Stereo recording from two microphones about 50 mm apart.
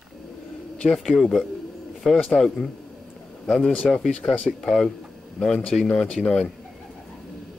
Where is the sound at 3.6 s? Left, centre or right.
Left.